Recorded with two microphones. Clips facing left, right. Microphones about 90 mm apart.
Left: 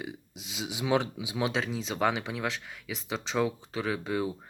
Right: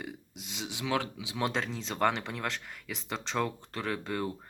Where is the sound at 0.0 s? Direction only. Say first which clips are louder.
Left 2 dB; centre (ahead or behind).